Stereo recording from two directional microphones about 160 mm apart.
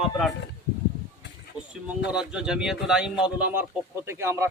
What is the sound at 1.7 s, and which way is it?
Speech, 5° right (ahead or behind).